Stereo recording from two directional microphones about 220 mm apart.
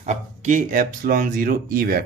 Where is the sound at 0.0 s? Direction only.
35° right (ahead or behind).